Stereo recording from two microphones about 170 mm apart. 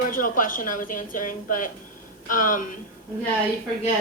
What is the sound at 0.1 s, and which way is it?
A woman's voice, 55° left (ahead or behind).